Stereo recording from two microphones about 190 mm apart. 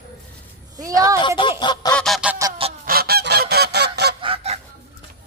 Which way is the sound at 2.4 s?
20° right (ahead or behind).